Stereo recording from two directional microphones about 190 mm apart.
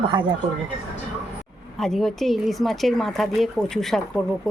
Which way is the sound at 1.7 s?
Centre (ahead or behind).